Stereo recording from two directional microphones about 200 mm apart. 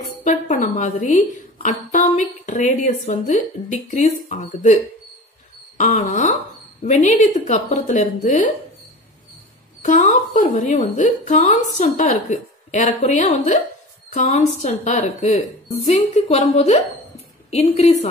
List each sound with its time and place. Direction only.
0.2 s a woman's voice: 35° left (ahead or behind)
5.8 s a woman's voice: 35° left (ahead or behind)
9.8 s a woman's voice: 35° left (ahead or behind)